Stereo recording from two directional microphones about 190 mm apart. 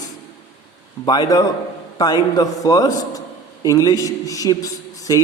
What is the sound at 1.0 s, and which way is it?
A man's voice, 20° left (ahead or behind).